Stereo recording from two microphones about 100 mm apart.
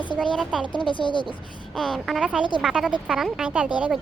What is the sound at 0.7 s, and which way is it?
Speech, 55° left (ahead or behind).